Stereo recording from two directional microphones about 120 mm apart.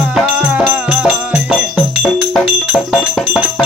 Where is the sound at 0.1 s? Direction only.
5° right (ahead or behind).